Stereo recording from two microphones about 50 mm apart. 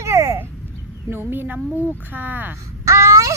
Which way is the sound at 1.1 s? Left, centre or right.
Right.